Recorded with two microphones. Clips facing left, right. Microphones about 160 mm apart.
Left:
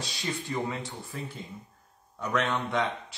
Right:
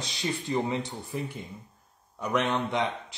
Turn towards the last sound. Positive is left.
turn(degrees=-20)  # may be behind; listen again after turning